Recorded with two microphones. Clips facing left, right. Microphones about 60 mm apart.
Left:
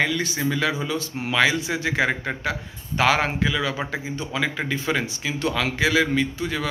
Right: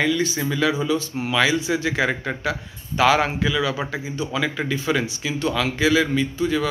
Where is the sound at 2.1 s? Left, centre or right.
Left.